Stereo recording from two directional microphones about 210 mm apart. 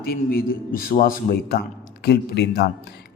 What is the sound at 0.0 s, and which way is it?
Speech, 45° left (ahead or behind).